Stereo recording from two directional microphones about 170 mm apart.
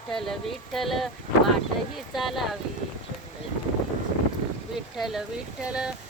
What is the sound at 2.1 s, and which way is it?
Speech, centre (ahead or behind).